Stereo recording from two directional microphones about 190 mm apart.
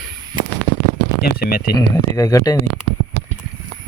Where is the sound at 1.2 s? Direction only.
55° left (ahead or behind).